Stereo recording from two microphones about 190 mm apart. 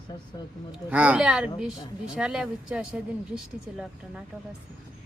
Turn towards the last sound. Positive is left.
turn(degrees=-5)  # may be behind; listen again after turning